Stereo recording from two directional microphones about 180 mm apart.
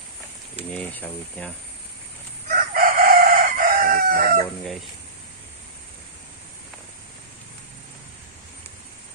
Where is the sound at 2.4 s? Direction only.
55° right (ahead or behind).